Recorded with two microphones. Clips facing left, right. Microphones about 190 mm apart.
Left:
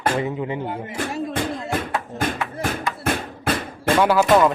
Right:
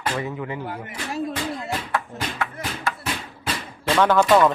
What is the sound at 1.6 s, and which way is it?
Music, 50° left (ahead or behind).